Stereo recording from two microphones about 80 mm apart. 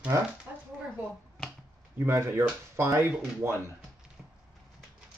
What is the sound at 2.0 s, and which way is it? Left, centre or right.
Speech, right.